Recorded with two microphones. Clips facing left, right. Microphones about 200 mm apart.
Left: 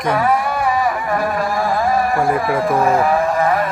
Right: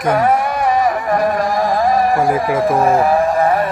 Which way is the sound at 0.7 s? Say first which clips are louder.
Right 5 dB; 40° right (ahead or behind).